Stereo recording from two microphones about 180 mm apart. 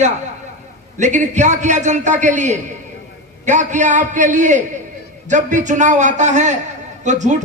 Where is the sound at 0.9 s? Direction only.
40° right (ahead or behind).